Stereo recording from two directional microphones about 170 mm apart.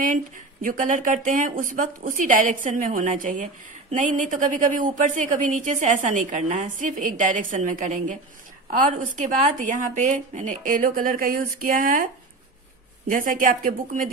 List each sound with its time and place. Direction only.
0.0 s a woman's voice: 50° right (ahead or behind)
13.1 s a woman's voice: 55° right (ahead or behind)